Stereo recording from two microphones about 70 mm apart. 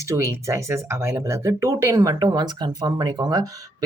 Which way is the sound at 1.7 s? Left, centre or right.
Right.